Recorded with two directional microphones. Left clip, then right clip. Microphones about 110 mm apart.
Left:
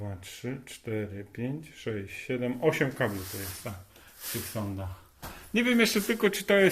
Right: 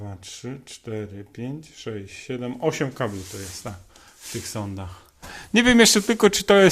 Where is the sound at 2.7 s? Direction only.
75° right (ahead or behind).